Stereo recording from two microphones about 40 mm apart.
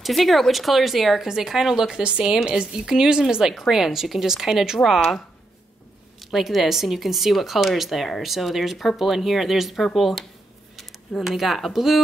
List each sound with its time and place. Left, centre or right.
0.0 s speech: centre
1.2 s speech: centre
3.5 s speech: centre
6.3 s speech: centre